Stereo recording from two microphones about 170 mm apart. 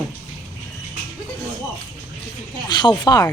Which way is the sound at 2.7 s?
25° left (ahead or behind).